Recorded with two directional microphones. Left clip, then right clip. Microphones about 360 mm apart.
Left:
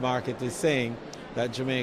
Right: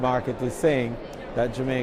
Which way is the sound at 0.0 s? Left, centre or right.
Right.